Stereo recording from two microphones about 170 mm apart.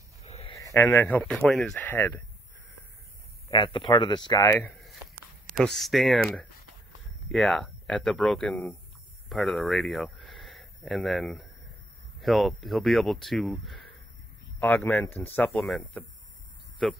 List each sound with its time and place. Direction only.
0.2 s a sound: 35° left (ahead or behind)
0.7 s speech: 15° left (ahead or behind)
3.4 s speech: 30° left (ahead or behind)
4.5 s speech: 15° left (ahead or behind)
5.5 s speech: centre (ahead or behind)
14.6 s speech: 10° left (ahead or behind)